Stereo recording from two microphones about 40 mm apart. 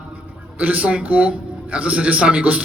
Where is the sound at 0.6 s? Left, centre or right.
Right.